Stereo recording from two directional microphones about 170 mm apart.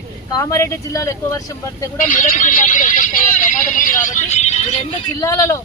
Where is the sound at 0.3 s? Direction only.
15° left (ahead or behind).